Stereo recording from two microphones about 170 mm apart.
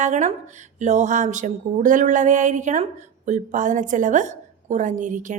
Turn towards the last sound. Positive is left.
turn(degrees=-50)  # may be behind; listen again after turning